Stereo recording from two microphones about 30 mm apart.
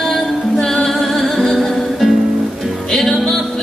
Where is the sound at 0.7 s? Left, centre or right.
Centre.